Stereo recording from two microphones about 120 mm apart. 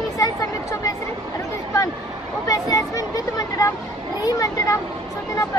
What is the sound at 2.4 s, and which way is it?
Speech, 30° left (ahead or behind).